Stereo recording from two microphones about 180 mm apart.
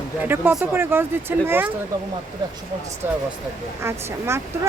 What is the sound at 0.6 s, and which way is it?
Speech, 10° right (ahead or behind).